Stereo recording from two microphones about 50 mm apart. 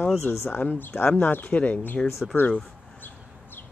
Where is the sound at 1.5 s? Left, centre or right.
Left.